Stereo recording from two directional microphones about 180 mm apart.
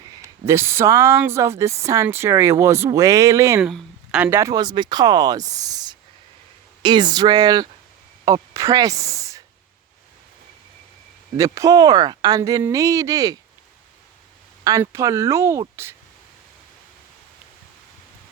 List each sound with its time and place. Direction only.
0.2 s a woman's voice: 15° right (ahead or behind)
3.6 s speech: centre (ahead or behind); by 9.4 s 20° right (ahead or behind)
11.3 s speech: 15° right (ahead or behind)
14.6 s a woman's voice: 20° right (ahead or behind)